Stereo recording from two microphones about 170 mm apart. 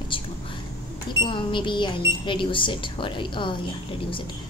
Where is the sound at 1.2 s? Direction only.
30° left (ahead or behind).